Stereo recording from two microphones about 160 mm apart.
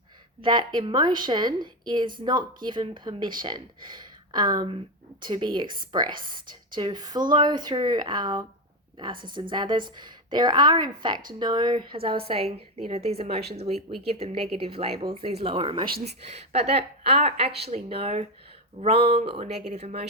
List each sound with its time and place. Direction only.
0.4 s speech: 30° right (ahead or behind)